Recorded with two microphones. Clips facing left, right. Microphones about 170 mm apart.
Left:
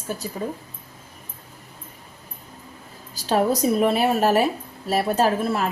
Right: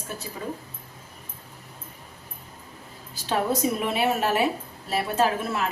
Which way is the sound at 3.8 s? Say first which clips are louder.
Left 5 dB; 40° left (ahead or behind).